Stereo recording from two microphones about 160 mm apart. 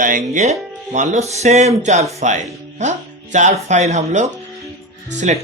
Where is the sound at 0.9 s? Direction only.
50° right (ahead or behind).